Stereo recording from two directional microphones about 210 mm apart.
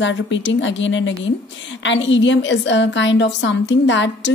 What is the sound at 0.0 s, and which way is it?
A woman's voice, 60° left (ahead or behind).